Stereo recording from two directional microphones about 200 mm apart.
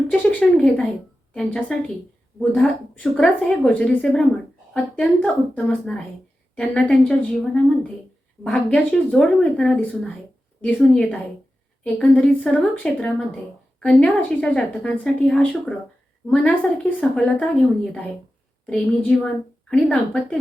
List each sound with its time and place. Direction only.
0.1 s speech: 5° left (ahead or behind)